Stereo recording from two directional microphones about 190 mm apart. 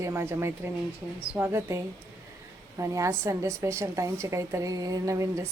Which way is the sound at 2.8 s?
15° right (ahead or behind).